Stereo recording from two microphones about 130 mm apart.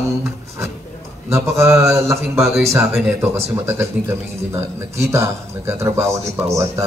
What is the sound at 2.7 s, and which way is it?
A man's voice, 20° right (ahead or behind).